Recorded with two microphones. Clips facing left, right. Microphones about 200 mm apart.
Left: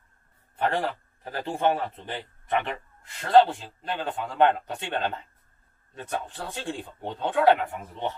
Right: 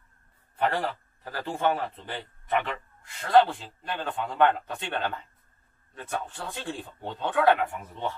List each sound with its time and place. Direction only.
0.6 s a man's voice: 20° left (ahead or behind)